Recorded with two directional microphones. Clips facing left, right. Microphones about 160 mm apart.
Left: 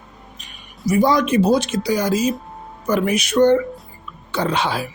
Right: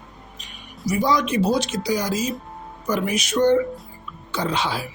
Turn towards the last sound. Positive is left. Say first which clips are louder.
# left 3 dB
turn(degrees=55)  # may be behind; listen again after turning